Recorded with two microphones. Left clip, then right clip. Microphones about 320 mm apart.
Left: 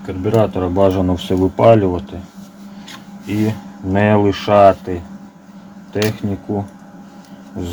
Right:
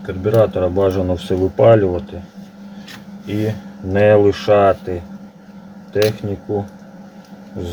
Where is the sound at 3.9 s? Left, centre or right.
Left.